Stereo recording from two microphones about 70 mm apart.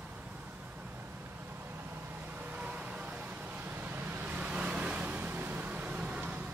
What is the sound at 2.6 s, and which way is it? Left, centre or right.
Vehicle, centre.